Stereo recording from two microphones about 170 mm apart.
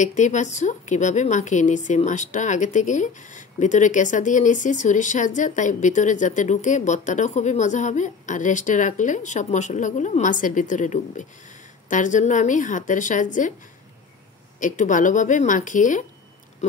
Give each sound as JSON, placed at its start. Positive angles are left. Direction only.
{"t": 0.0, "sound": "a woman's voice", "side_deg": 45}
{"t": 14.6, "sound": "a woman's voice", "side_deg": 50}